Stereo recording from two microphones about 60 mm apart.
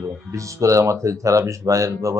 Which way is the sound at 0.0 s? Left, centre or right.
Right.